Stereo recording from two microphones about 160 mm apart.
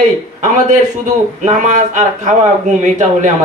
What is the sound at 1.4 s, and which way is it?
A man's voice, 50° right (ahead or behind).